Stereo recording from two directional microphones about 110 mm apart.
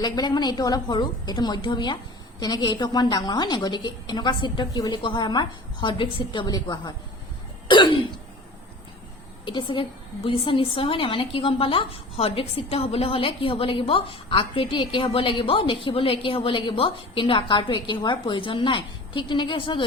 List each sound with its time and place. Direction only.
0.0 s a woman's voice: 40° left (ahead or behind)
9.4 s a woman's voice: 45° left (ahead or behind)